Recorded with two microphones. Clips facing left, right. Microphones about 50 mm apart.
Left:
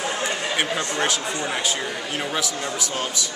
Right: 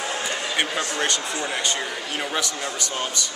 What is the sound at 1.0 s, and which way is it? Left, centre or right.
A man's voice, centre.